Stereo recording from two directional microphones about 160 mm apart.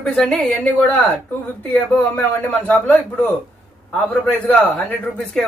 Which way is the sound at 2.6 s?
10° left (ahead or behind).